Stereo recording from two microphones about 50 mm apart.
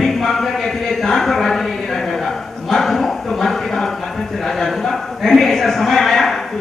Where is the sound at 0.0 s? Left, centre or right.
Centre.